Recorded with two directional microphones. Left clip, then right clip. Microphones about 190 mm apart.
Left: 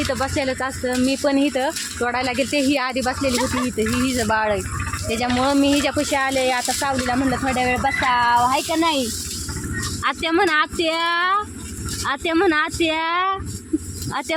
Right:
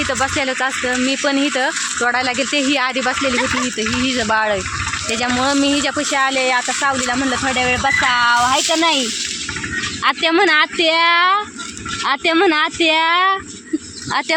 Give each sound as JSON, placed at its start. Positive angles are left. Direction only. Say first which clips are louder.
{"t": 0.0, "sound": "speech", "louder": "right 4 dB", "side_deg": 0}
{"t": 5.1, "sound": "speech", "louder": "right 1 dB", "side_deg": 0}
{"t": 10.0, "sound": "speech", "louder": "right 5 dB", "side_deg": -20}